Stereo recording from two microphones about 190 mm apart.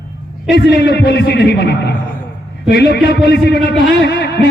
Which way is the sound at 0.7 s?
60° left (ahead or behind).